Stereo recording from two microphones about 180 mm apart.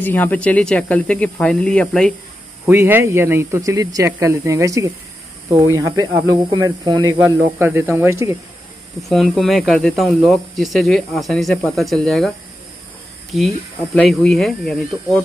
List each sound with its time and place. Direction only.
0.0 s speech: 10° left (ahead or behind)
2.7 s speech: 15° right (ahead or behind)
9.1 s speech: centre (ahead or behind)
13.9 s speech: centre (ahead or behind)